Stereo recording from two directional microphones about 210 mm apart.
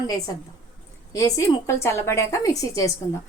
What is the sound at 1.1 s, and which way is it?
A woman's voice, 15° left (ahead or behind).